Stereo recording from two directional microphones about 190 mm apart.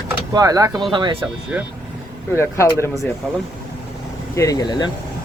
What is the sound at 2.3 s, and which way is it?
Speech, 15° left (ahead or behind).